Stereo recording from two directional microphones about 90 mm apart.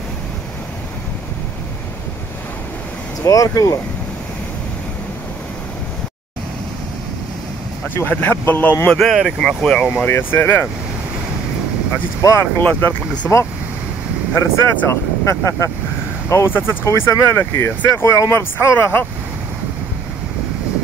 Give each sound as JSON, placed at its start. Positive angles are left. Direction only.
{"t": 3.3, "sound": "speech", "side_deg": 40}
{"t": 7.9, "sound": "speech", "side_deg": 20}
{"t": 8.8, "sound": "speech", "side_deg": 5}
{"t": 10.1, "sound": "speech", "side_deg": 25}
{"t": 12.2, "sound": "speech", "side_deg": 35}
{"t": 12.5, "sound": "speech", "side_deg": 20}
{"t": 14.3, "sound": "speech", "side_deg": 30}